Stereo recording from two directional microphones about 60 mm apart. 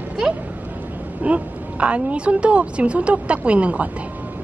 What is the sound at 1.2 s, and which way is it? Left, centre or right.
A woman's voice, right.